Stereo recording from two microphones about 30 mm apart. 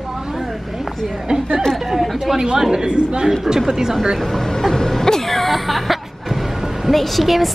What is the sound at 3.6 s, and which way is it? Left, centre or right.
Speech, centre.